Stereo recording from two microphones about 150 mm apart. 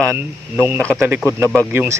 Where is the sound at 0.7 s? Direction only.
Centre (ahead or behind).